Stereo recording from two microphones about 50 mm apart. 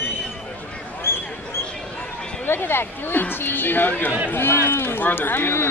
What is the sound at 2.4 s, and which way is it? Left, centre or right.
Speech, left.